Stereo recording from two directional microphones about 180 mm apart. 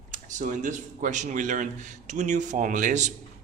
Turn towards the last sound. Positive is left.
turn(degrees=-45)  # may be behind; listen again after turning